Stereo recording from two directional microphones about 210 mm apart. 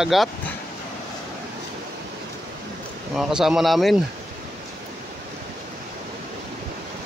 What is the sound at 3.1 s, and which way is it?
Speech, centre (ahead or behind).